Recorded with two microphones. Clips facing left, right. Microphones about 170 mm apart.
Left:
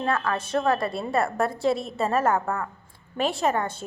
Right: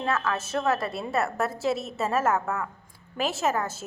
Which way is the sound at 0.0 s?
5° right (ahead or behind).